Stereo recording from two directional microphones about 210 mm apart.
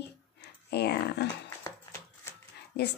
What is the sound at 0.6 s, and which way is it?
Speech, 50° left (ahead or behind).